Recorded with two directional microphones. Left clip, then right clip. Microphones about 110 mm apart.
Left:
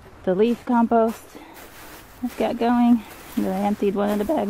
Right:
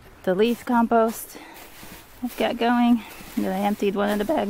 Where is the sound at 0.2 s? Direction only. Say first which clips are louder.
Left 1 dB; 35° right (ahead or behind).